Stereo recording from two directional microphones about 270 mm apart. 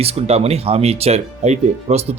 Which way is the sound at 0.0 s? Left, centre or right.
Right.